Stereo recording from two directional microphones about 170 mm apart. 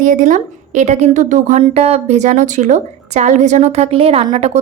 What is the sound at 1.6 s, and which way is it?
A woman's voice, 35° right (ahead or behind).